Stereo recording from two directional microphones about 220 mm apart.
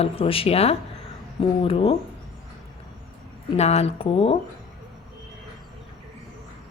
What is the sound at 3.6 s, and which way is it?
Speech, 30° left (ahead or behind).